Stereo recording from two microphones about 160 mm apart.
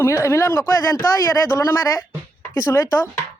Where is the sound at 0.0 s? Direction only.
15° left (ahead or behind).